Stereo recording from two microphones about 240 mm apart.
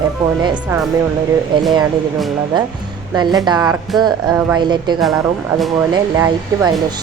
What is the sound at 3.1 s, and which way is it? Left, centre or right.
Speech, centre.